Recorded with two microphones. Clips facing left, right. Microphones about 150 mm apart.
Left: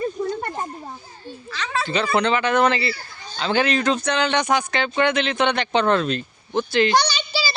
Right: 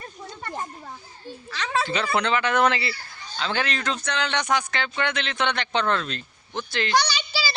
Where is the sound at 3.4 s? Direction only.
10° left (ahead or behind).